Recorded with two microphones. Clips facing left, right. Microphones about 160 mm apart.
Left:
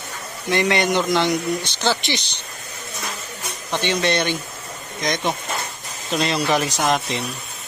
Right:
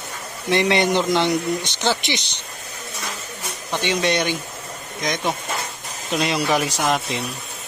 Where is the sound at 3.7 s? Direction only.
10° right (ahead or behind).